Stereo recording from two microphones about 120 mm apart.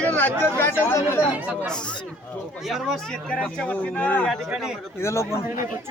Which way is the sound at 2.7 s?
Centre (ahead or behind).